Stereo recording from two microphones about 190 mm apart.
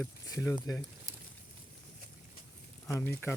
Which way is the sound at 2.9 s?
15° left (ahead or behind).